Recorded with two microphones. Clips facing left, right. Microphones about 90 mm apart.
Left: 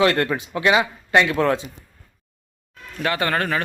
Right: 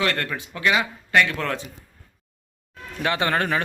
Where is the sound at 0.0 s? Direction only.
25° left (ahead or behind).